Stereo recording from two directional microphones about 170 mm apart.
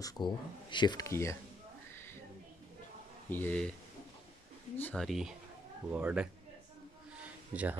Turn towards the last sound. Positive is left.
turn(degrees=-10)  # may be behind; listen again after turning